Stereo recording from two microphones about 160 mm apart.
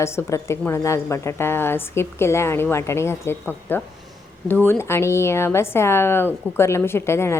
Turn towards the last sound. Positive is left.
turn(degrees=15)  # may be behind; listen again after turning